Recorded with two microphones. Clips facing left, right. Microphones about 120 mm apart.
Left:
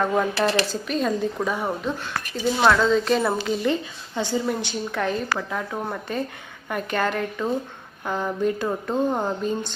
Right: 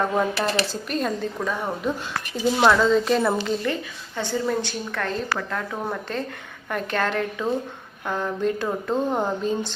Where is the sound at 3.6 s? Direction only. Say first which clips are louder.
Left 3 dB; 20° left (ahead or behind).